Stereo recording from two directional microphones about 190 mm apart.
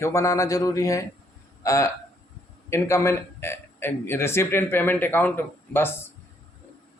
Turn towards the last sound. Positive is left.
turn(degrees=10)  # may be behind; listen again after turning